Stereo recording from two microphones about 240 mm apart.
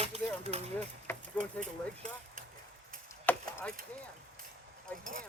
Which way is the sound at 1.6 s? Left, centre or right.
Right.